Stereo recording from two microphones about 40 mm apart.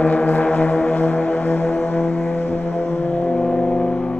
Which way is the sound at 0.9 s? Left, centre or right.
Left.